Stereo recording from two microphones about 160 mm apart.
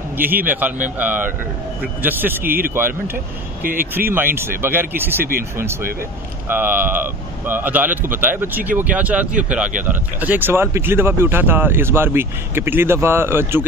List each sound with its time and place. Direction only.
0.2 s speech: 10° right (ahead or behind)
3.6 s speech: 60° right (ahead or behind)
4.1 s speech: 15° right (ahead or behind)
5.2 s speech: 65° right (ahead or behind)
5.7 s speech: 15° right (ahead or behind)